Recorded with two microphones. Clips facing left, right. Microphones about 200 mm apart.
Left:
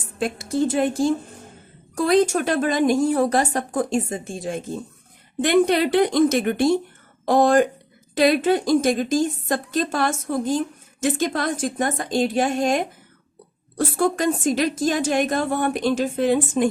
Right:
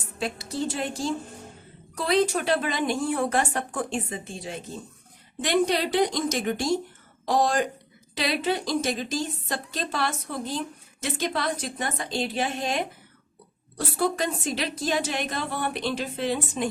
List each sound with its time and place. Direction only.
0.2 s a woman's voice: 50° left (ahead or behind)